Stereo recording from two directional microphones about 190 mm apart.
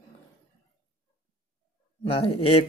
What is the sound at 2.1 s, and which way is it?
Speech, 30° left (ahead or behind).